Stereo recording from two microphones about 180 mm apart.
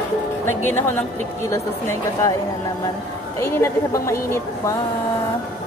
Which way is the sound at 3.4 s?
15° left (ahead or behind).